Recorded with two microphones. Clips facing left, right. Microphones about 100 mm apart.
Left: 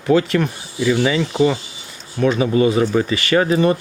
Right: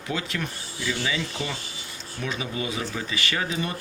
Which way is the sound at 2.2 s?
55° left (ahead or behind).